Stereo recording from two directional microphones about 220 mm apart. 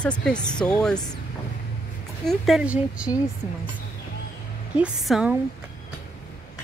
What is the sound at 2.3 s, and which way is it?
Speech, centre (ahead or behind).